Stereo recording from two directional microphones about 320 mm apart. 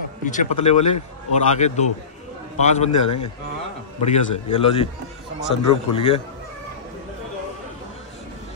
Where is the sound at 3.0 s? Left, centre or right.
Left.